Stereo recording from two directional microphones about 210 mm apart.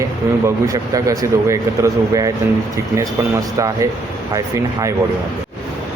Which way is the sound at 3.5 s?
15° right (ahead or behind).